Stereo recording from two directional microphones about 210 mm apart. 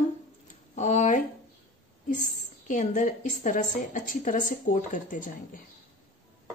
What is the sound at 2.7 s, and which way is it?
A woman's voice, 35° left (ahead or behind).